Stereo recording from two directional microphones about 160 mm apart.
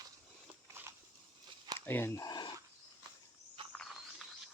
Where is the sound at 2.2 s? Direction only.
25° left (ahead or behind).